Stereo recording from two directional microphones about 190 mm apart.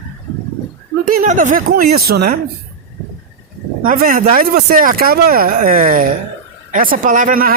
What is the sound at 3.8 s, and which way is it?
Speech, 50° right (ahead or behind).